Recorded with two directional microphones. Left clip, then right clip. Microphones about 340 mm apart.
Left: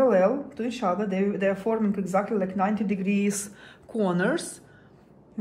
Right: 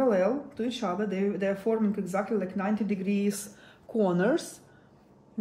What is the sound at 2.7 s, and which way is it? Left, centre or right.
A woman's voice, centre.